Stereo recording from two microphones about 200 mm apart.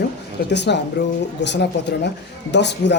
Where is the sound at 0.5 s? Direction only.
60° left (ahead or behind).